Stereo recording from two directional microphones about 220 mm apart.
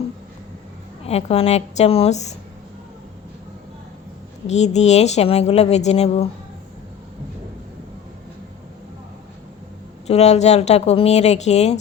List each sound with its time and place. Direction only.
1.0 s speech: 25° left (ahead or behind)
4.4 s speech: 30° left (ahead or behind)
10.1 s speech: 30° left (ahead or behind)